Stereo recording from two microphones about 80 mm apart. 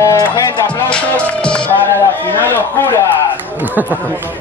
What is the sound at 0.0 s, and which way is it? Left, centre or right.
Speech, left.